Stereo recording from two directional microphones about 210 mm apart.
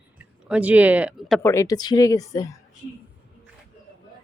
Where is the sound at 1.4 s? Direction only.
15° left (ahead or behind).